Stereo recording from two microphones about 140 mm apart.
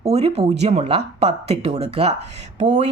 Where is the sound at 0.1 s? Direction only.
50° right (ahead or behind).